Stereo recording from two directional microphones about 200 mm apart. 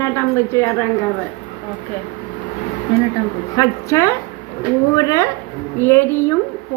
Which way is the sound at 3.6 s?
15° left (ahead or behind).